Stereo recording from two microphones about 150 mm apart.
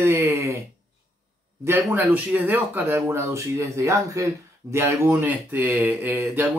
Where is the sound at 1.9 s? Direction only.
10° right (ahead or behind).